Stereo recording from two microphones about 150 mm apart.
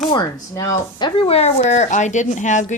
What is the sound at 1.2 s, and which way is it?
Speech, 40° left (ahead or behind).